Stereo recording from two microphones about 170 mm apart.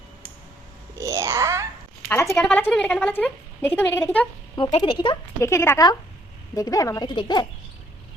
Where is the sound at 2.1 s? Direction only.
15° left (ahead or behind).